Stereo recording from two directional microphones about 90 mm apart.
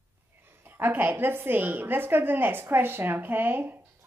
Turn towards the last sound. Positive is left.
turn(degrees=-25)  # may be behind; listen again after turning